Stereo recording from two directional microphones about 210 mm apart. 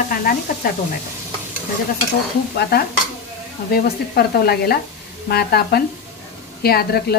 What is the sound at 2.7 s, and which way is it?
Speech, 50° left (ahead or behind).